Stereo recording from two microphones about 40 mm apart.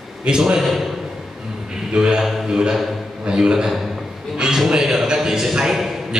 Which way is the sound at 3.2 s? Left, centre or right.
Centre.